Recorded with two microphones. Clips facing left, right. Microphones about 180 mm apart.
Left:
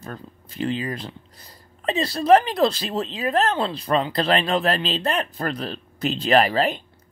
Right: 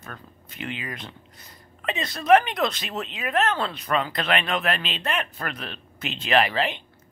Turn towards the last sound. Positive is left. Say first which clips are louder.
# left 4 dB
turn(degrees=40)  # may be behind; listen again after turning